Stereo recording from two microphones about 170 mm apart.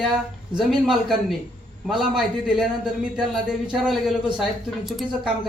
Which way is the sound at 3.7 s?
5° right (ahead or behind).